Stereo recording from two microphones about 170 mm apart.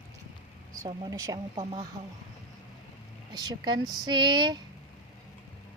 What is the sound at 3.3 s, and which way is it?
A woman's voice, 25° right (ahead or behind).